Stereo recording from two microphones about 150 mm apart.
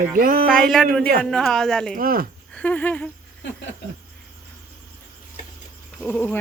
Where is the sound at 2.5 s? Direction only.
10° left (ahead or behind).